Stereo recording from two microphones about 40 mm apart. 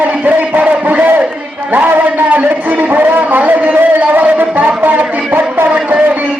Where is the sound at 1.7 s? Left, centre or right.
Right.